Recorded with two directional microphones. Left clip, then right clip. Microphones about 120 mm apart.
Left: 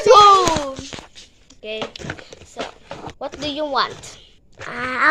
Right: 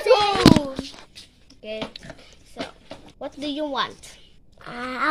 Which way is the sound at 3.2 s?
30° right (ahead or behind).